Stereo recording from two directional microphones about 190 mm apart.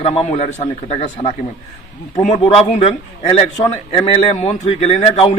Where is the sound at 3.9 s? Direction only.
35° left (ahead or behind).